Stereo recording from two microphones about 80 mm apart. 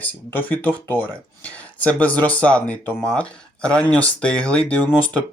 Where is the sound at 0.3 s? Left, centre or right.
Left.